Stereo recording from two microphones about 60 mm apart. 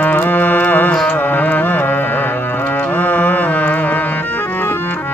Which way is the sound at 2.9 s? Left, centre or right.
Left.